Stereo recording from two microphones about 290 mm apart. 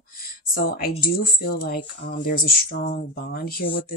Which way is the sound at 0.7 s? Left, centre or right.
Left.